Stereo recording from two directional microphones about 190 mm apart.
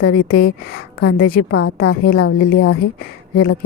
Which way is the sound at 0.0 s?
50° left (ahead or behind).